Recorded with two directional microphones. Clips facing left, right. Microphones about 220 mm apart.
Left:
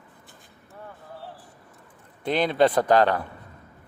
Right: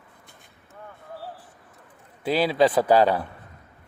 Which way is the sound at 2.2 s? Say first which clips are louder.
Even; 5° right (ahead or behind).